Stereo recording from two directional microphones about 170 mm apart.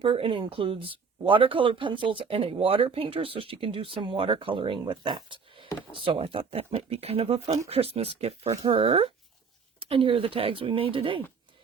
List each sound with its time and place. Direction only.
0.0 s speech: 30° right (ahead or behind)